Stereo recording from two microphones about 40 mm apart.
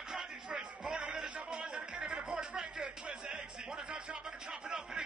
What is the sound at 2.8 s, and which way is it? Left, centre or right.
Speech, centre.